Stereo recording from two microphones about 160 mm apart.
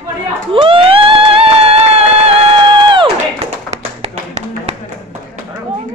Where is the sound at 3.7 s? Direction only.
45° right (ahead or behind).